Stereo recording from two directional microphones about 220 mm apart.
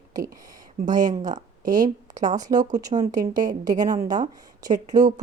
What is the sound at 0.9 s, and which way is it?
Speech, 35° right (ahead or behind).